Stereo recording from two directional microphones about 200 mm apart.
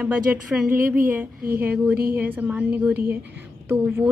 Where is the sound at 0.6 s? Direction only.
45° right (ahead or behind).